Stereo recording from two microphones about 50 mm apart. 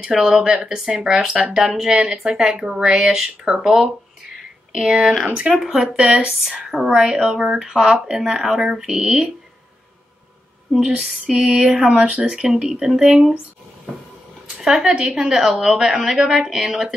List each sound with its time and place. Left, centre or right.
0.0 s speech: centre
5.5 s speech: centre
5.9 s speech: right
6.7 s speech: centre
10.8 s speech: right
11.9 s speech: right
12.3 s speech: centre
12.9 s speech: centre
14.6 s speech: centre
15.3 s speech: centre